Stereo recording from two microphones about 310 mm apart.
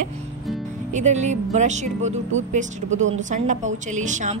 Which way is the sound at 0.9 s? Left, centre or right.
Right.